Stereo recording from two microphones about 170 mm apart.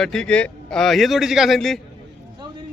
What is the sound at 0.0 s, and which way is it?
Speech, 5° left (ahead or behind).